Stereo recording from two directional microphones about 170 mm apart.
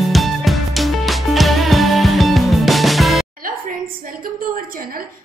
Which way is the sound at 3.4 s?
55° right (ahead or behind).